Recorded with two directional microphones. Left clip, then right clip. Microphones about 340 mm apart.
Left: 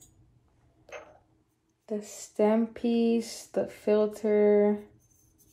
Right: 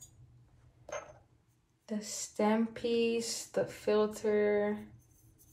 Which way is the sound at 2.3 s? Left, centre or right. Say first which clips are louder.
Left 6 dB; left.